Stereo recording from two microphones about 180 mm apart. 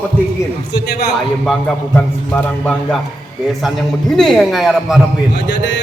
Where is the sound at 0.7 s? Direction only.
65° left (ahead or behind).